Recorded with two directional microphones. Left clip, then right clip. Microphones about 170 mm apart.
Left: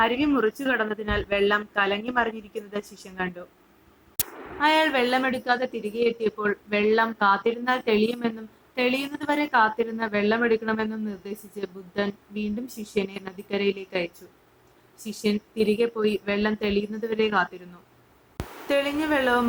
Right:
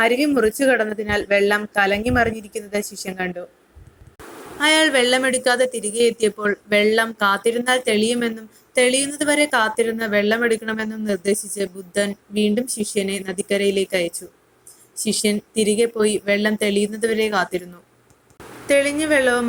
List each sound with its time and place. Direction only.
0.0 s speech: 15° right (ahead or behind)
4.6 s speech: 20° right (ahead or behind)
5.7 s speech: 65° right (ahead or behind)
6.0 s speech: 20° right (ahead or behind)
12.5 s speech: 20° right (ahead or behind)
15.1 s speech: 25° right (ahead or behind)
18.7 s speech: 15° right (ahead or behind)